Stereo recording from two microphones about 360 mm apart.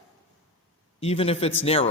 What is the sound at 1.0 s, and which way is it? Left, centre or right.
Speech, centre.